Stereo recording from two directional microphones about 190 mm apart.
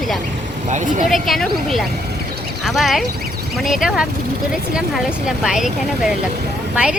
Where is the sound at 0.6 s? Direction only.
40° right (ahead or behind).